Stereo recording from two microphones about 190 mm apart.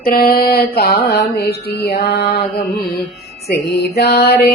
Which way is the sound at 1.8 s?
55° left (ahead or behind).